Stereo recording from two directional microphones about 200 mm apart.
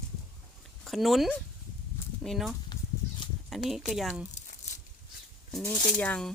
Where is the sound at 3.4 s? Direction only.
Centre (ahead or behind).